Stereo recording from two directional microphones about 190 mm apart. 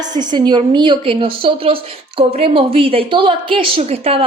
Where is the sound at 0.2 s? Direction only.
20° right (ahead or behind).